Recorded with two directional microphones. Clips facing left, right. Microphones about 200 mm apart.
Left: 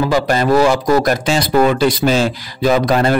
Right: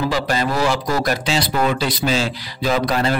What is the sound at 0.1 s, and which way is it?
Speech, 50° left (ahead or behind).